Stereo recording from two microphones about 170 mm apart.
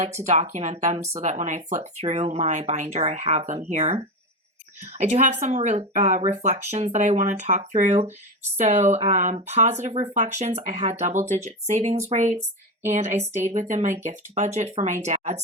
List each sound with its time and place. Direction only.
0.3 s speech: 40° right (ahead or behind)